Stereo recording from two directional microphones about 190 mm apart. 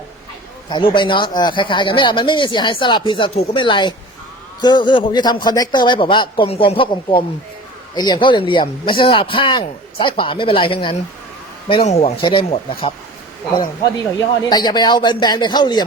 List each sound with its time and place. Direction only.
0.7 s a man's voice: 25° left (ahead or behind)
14.5 s speech: 20° left (ahead or behind)